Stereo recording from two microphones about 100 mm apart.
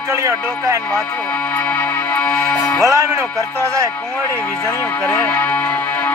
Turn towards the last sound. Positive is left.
turn(degrees=15)  # may be behind; listen again after turning